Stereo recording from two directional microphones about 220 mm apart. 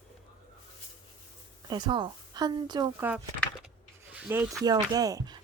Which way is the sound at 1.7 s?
20° right (ahead or behind).